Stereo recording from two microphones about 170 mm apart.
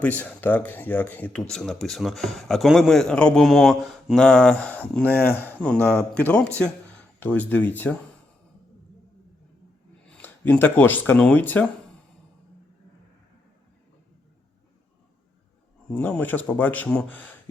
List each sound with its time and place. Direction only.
0.2 s speech: 10° left (ahead or behind)
10.1 s speech: 10° left (ahead or behind)
15.9 s speech: 10° left (ahead or behind)